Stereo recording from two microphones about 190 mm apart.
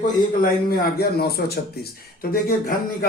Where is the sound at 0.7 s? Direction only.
55° left (ahead or behind).